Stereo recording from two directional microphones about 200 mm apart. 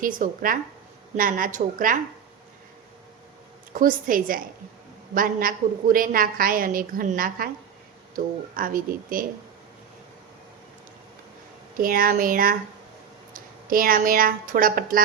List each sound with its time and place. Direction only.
0.0 s a woman's voice: 45° right (ahead or behind)
3.7 s a woman's voice: 45° right (ahead or behind)
11.8 s a woman's voice: 45° right (ahead or behind)